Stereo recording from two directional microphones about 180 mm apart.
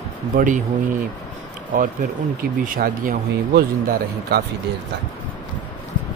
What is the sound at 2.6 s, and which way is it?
Speech, 55° right (ahead or behind).